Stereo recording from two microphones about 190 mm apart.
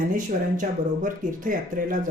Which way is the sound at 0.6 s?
45° right (ahead or behind).